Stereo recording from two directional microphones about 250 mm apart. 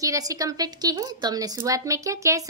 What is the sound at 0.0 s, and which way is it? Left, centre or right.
A woman's voice, centre.